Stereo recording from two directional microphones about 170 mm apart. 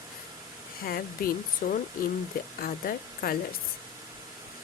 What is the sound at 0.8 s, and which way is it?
Speech, 60° left (ahead or behind).